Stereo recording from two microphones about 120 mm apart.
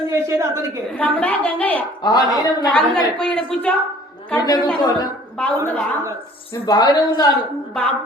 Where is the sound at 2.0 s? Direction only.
35° left (ahead or behind).